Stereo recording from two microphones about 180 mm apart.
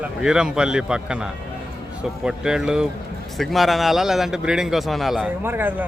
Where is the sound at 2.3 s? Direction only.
5° right (ahead or behind).